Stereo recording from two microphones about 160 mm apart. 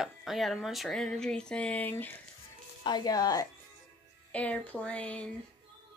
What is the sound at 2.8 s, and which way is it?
Speech, 25° left (ahead or behind).